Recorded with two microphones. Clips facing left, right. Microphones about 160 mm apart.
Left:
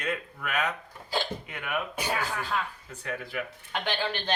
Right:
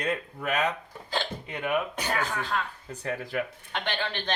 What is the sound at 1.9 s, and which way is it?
Speech, 10° left (ahead or behind).